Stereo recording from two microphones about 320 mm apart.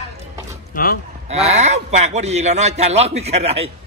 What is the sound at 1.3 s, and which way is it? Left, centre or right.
A man's voice, right.